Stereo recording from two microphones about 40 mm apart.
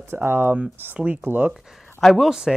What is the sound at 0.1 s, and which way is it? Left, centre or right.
Speech, right.